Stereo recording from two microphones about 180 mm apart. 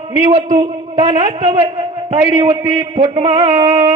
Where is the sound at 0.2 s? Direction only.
35° right (ahead or behind).